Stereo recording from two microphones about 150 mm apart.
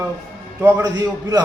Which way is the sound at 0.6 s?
25° right (ahead or behind).